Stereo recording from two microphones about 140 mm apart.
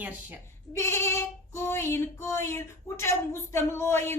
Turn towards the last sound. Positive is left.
turn(degrees=15)  # may be behind; listen again after turning